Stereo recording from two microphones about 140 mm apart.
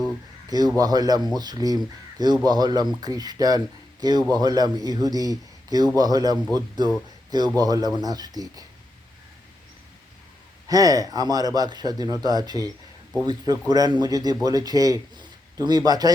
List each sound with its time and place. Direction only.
0.4 s speech: 30° right (ahead or behind)
10.7 s a man's voice: 25° right (ahead or behind)